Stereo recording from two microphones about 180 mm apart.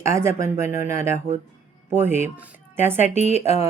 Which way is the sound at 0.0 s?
15° right (ahead or behind).